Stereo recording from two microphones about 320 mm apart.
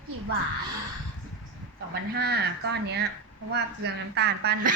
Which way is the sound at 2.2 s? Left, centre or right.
Right.